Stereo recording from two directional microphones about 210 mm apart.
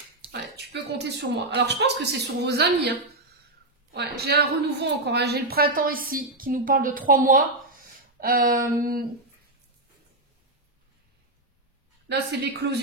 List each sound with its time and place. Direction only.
0.3 s a woman's voice: 55° right (ahead or behind)
3.9 s a woman's voice: 50° right (ahead or behind)
8.2 s a sound: 40° right (ahead or behind)
12.1 s a woman's voice: 55° right (ahead or behind)